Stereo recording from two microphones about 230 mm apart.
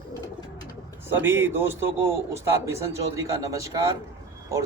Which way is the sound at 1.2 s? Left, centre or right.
Centre.